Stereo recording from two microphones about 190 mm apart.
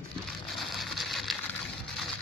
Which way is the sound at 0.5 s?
Centre (ahead or behind).